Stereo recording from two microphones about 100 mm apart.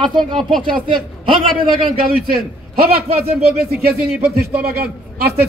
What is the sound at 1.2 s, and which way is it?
Speech, 60° right (ahead or behind).